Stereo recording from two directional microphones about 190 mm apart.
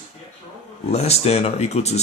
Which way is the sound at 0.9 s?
35° left (ahead or behind).